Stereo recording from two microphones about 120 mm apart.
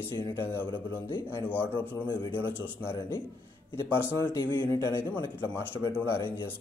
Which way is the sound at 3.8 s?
20° left (ahead or behind).